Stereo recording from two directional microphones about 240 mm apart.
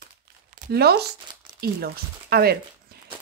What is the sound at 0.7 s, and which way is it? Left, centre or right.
Speech, right.